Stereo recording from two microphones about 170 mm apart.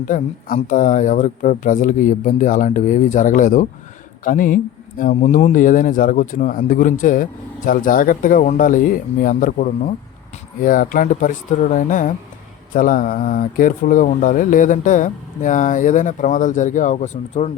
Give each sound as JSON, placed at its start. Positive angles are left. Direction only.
{"t": 0.1, "sound": "a man's voice", "side_deg": 55}